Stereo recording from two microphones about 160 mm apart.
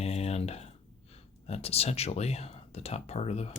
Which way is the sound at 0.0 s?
40° left (ahead or behind).